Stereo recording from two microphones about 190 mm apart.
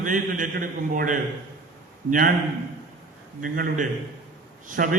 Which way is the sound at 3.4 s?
45° right (ahead or behind).